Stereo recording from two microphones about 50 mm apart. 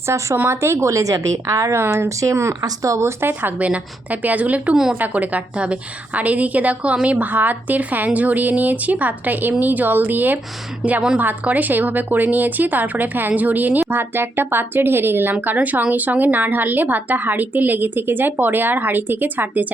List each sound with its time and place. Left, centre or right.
0.3 s a woman's voice: right
3.4 s speech: right
4.7 s a woman's voice: centre
4.9 s speech: right
14.0 s speech: right